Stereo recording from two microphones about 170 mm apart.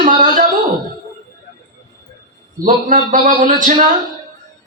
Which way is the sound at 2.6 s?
50° right (ahead or behind).